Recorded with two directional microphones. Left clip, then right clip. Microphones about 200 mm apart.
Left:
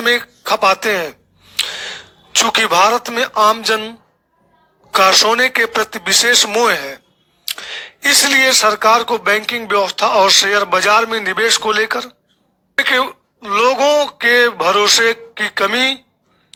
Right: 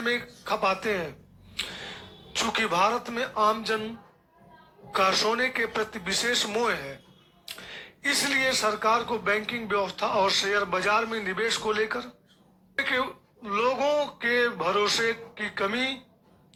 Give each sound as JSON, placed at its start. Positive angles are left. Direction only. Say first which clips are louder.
{"t": 0.0, "sound": "speech", "louder": "left 13 dB", "side_deg": 45}